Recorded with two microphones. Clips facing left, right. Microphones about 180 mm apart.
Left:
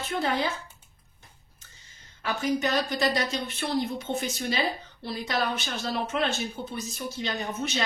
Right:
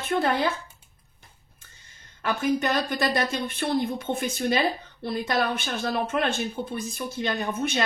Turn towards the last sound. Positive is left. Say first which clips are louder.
# right 4 dB
turn(degrees=-55)  # may be behind; listen again after turning